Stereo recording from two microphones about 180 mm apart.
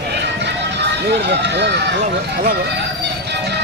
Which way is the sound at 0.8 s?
70° right (ahead or behind).